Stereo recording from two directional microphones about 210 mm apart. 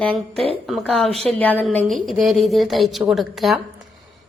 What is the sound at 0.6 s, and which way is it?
A woman's voice, centre (ahead or behind).